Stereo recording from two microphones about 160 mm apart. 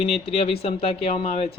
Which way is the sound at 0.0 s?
40° left (ahead or behind).